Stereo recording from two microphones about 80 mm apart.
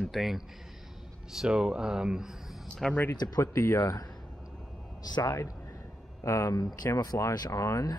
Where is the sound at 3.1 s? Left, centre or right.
Left.